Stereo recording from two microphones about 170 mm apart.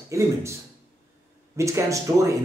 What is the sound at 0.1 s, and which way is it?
Speech, 15° right (ahead or behind).